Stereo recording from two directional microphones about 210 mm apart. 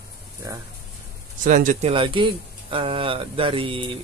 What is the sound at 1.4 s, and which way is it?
Speech, 40° right (ahead or behind).